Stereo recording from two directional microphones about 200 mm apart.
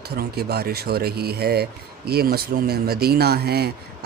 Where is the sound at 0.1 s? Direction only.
55° right (ahead or behind).